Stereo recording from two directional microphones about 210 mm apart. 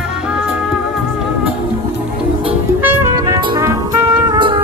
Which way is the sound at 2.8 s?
15° right (ahead or behind).